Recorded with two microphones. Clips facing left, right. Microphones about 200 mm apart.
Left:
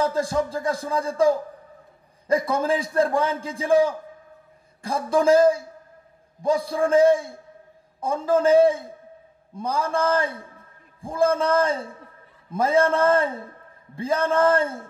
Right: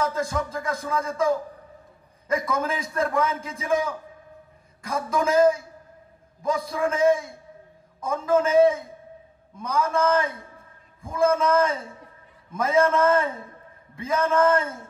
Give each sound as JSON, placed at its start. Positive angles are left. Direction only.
{"t": 0.0, "sound": "a man's voice", "side_deg": 30}